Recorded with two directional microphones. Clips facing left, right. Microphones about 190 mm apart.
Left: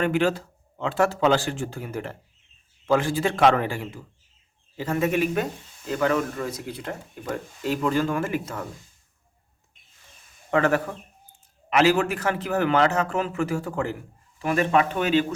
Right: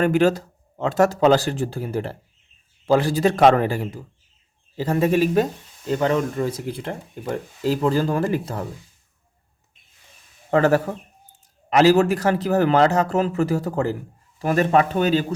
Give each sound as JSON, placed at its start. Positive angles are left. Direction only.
{"t": 0.0, "sound": "speech", "side_deg": -40}
{"t": 10.5, "sound": "speech", "side_deg": -35}